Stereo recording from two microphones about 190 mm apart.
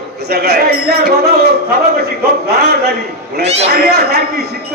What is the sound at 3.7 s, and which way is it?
Speech, 55° right (ahead or behind).